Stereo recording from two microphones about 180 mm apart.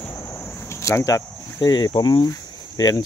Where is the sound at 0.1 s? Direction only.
15° left (ahead or behind).